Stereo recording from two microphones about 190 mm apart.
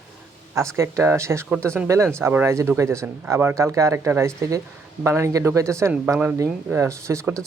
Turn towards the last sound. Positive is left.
turn(degrees=-15)  # may be behind; listen again after turning